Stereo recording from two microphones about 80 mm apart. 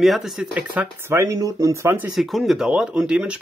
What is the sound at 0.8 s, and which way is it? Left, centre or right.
Speech, centre.